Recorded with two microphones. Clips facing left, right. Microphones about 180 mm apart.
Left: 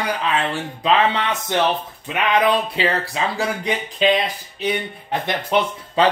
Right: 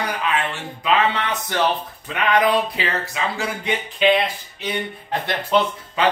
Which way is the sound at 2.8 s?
30° left (ahead or behind).